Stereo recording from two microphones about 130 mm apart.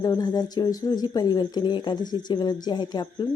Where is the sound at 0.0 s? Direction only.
30° left (ahead or behind).